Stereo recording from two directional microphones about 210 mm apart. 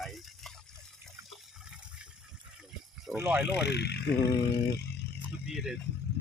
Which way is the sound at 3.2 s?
5° right (ahead or behind).